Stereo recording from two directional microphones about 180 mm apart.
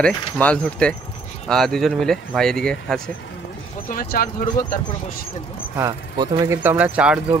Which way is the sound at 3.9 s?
50° left (ahead or behind).